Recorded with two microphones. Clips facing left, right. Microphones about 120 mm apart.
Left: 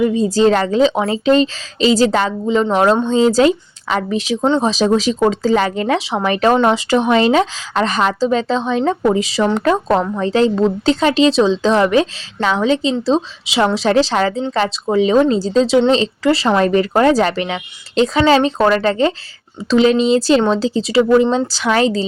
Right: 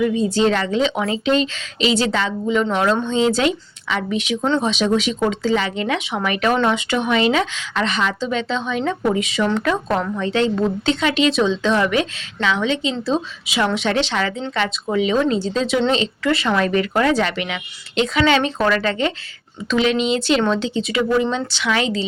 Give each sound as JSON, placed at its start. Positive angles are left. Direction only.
{"t": 0.0, "sound": "a woman's voice", "side_deg": 35}